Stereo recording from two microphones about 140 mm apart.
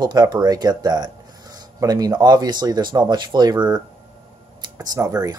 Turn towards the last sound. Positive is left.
turn(degrees=-25)  # may be behind; listen again after turning